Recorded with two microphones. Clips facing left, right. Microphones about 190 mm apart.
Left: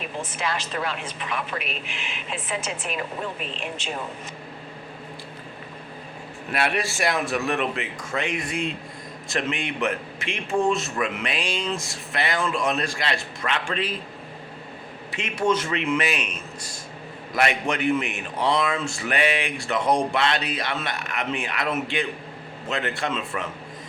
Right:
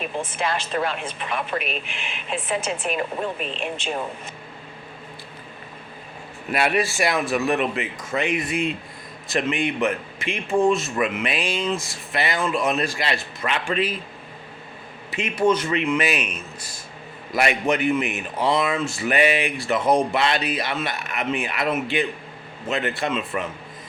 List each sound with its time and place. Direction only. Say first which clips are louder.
0.2 s speech: right 2 dB; 55° right (ahead or behind)
6.7 s speech: right 3 dB; centre (ahead or behind)
15.1 s speech: right 3 dB; centre (ahead or behind)
17.3 s speech: right 3 dB; 5° right (ahead or behind)